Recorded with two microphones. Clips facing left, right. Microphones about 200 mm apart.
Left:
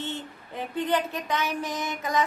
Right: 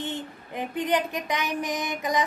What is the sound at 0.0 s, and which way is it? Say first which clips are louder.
A woman's voice: right 2 dB; 15° right (ahead or behind).